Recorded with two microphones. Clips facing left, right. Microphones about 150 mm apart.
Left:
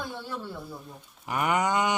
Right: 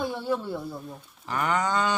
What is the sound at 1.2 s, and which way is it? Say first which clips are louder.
Livestock: even; 10° left (ahead or behind).